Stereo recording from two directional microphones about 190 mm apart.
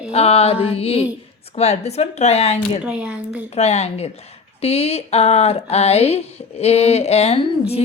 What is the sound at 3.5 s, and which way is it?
A woman's voice, 35° left (ahead or behind).